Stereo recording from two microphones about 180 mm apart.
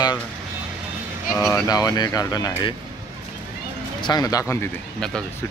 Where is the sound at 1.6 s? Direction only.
20° left (ahead or behind).